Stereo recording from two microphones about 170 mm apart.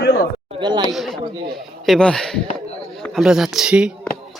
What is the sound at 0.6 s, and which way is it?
Speech, 25° right (ahead or behind).